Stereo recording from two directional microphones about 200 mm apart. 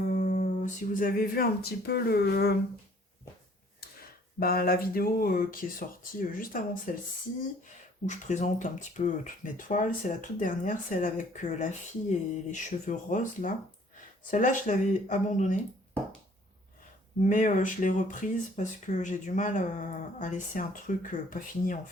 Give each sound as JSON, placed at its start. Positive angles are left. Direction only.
{"t": 0.1, "sound": "music", "side_deg": 35}
{"t": 1.9, "sound": "speech", "side_deg": 50}
{"t": 4.4, "sound": "speech", "side_deg": 50}
{"t": 8.0, "sound": "speech", "side_deg": 35}
{"t": 17.2, "sound": "speech", "side_deg": 40}